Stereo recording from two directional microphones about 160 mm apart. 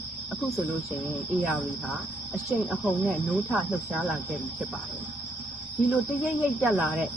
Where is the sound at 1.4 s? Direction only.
5° right (ahead or behind).